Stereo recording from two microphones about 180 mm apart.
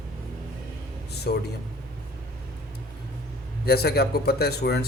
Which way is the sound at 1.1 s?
65° left (ahead or behind).